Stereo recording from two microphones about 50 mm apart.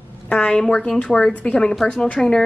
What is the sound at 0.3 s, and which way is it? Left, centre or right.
A woman's voice, centre.